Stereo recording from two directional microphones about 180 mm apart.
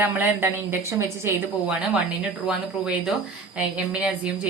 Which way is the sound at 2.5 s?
5° right (ahead or behind).